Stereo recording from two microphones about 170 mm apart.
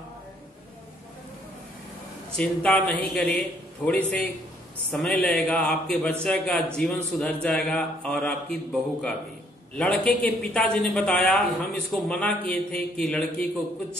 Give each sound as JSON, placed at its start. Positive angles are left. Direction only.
{"t": 2.3, "sound": "a man's voice", "side_deg": 5}